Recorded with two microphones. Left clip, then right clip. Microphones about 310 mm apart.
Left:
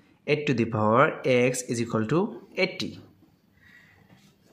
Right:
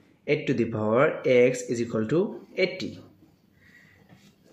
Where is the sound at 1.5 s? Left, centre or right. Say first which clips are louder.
Right 1 dB; left.